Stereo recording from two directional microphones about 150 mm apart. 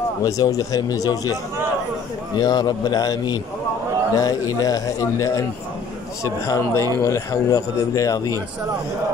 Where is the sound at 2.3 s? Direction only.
30° left (ahead or behind).